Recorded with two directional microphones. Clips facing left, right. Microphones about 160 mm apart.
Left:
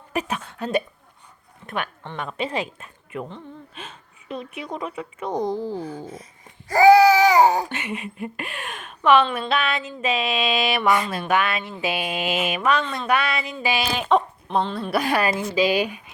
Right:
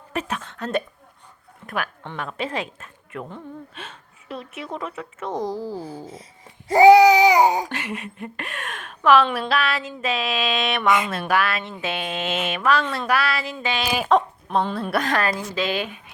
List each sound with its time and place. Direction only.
0.1 s speech: 10° left (ahead or behind)
1.6 s speech: centre (ahead or behind)
4.3 s a woman's voice: centre (ahead or behind)
6.7 s baby cry: 20° right (ahead or behind)
7.7 s a woman's voice: 5° left (ahead or behind)
13.6 s speech: 10° left (ahead or behind)
13.9 s a woman's voice: 5° right (ahead or behind)
15.0 s speech: 10° left (ahead or behind)